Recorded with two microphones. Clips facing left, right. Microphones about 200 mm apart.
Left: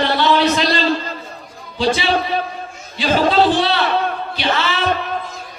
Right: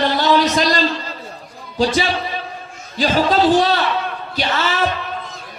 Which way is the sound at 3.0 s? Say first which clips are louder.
Left 1 dB; 40° right (ahead or behind).